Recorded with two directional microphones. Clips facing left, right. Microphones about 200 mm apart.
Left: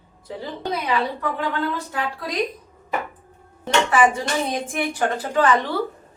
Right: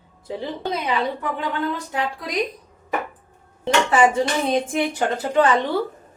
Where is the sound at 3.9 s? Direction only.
25° right (ahead or behind).